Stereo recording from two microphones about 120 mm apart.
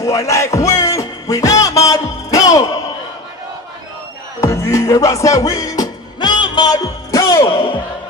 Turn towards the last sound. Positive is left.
turn(degrees=45)  # may be behind; listen again after turning